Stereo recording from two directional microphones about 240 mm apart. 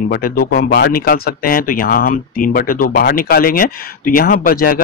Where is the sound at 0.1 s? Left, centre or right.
Left.